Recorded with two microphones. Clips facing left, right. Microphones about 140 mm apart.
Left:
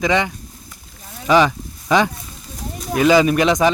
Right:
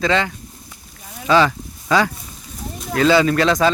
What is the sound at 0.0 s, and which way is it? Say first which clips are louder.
Speech: left 1 dB; 15° left (ahead or behind).